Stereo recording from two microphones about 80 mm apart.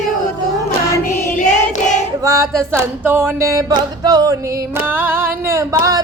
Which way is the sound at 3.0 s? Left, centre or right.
Right.